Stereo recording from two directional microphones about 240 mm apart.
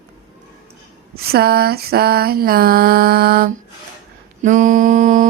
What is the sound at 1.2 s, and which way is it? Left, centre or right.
Mantra, right.